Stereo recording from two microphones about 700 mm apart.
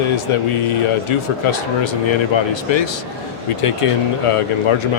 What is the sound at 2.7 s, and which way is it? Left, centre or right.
Speech, left.